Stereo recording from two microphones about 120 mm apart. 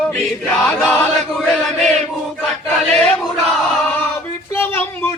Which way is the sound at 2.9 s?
10° left (ahead or behind).